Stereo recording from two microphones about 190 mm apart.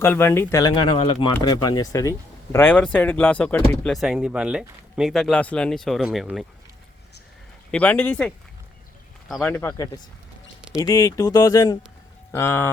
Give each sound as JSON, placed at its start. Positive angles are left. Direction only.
{"t": 0.0, "sound": "speech", "side_deg": 10}
{"t": 3.9, "sound": "speech", "side_deg": -5}
{"t": 7.7, "sound": "speech", "side_deg": 10}
{"t": 9.4, "sound": "speech", "side_deg": 10}